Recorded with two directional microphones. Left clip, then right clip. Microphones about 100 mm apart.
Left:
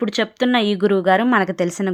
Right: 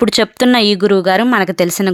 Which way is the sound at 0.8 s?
25° right (ahead or behind).